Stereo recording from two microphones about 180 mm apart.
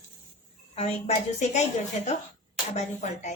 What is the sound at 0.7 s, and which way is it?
Speech, 35° left (ahead or behind).